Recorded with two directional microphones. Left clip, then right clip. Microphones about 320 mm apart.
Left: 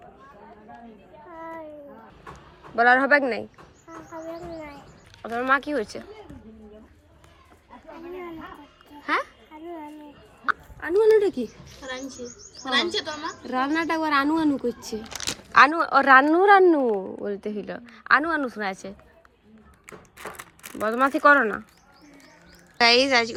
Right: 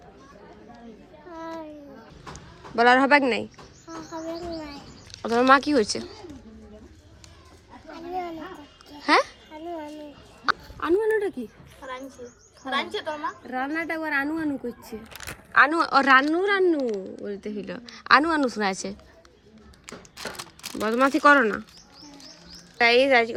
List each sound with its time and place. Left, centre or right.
2.7 s a woman's voice: centre
5.1 s speech: centre
9.0 s babbling: centre
11.0 s a woman's voice: centre
12.6 s speech: centre
13.5 s a woman's voice: centre
16.8 s speech: left
17.2 s a woman's voice: centre
19.9 s crumpling: centre
20.8 s a woman's voice: centre
22.8 s a woman's voice: centre